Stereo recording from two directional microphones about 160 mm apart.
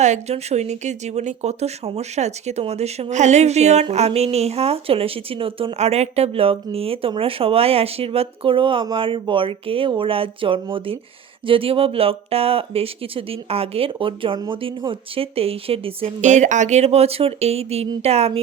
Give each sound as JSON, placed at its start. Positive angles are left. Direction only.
{"t": 0.0, "sound": "speech", "side_deg": -45}